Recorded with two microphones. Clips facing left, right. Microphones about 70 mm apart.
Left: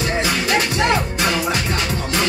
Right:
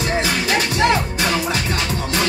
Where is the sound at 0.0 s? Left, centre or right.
Left.